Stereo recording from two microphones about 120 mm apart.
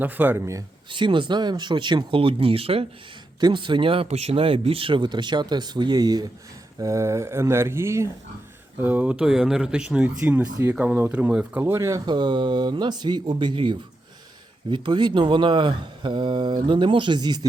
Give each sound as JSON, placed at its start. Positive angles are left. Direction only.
{"t": 0.0, "sound": "speech", "side_deg": -15}
{"t": 0.9, "sound": "speech", "side_deg": -40}
{"t": 11.6, "sound": "speech", "side_deg": -25}
{"t": 12.0, "sound": "speech", "side_deg": -40}